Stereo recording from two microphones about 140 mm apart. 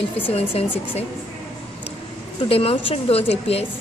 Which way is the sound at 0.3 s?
45° left (ahead or behind).